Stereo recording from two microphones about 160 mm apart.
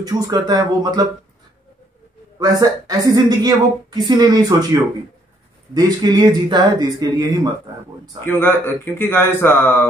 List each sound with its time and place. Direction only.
0.0 s a woman's voice: 25° right (ahead or behind)
2.3 s a woman's voice: 20° right (ahead or behind)
5.8 s a woman's voice: 25° right (ahead or behind)
8.3 s a man's voice: 15° left (ahead or behind)